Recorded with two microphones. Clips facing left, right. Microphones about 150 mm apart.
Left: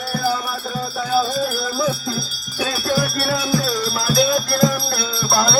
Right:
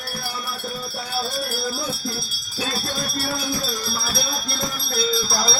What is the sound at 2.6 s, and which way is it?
Music, 90° left.